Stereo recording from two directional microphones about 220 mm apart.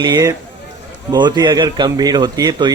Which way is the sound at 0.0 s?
15° right (ahead or behind).